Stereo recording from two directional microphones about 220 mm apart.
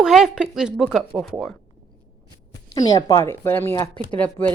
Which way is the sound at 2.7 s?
15° left (ahead or behind).